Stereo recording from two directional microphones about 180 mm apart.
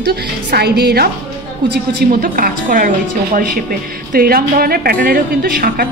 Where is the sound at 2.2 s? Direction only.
50° right (ahead or behind).